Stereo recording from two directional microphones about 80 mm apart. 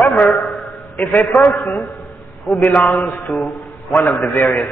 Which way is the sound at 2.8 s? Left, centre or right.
Centre.